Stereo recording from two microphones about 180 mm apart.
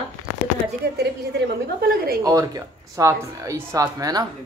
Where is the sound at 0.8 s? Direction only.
65° right (ahead or behind).